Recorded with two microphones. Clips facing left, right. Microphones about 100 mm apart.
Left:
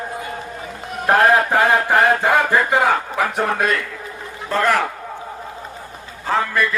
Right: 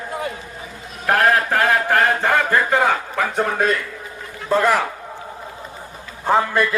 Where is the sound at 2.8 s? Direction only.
5° left (ahead or behind).